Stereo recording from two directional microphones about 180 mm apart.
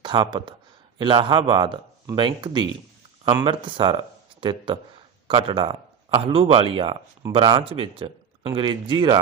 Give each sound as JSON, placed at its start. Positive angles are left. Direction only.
{"t": 0.0, "sound": "speech", "side_deg": -25}